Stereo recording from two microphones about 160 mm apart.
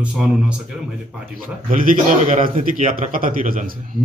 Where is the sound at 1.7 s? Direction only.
55° right (ahead or behind).